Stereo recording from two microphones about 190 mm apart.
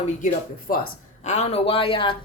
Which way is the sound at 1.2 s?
40° left (ahead or behind).